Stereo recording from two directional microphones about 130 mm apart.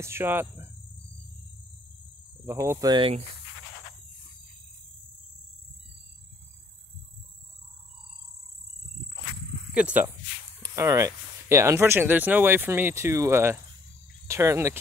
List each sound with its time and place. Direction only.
0.0 s speech: 20° right (ahead or behind)
2.4 s speech: 20° right (ahead or behind)
2.9 s speech: 45° right (ahead or behind)
9.8 s speech: 10° right (ahead or behind)
10.6 s speech: 25° right (ahead or behind)